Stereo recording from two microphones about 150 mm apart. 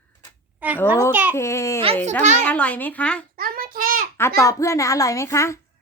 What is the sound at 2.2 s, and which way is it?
Speech, 50° right (ahead or behind).